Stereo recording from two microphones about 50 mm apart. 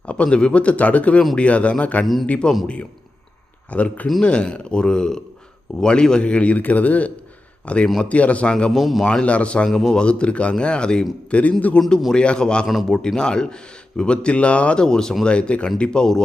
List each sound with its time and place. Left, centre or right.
0.1 s speech: left
3.7 s a man's voice: left
8.7 s a man's voice: centre
9.0 s speech: left
9.6 s speech: centre; by 14.8 s left
14.8 s speech: centre